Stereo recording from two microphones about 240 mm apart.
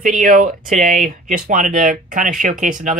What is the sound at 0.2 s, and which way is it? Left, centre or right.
Speech, right.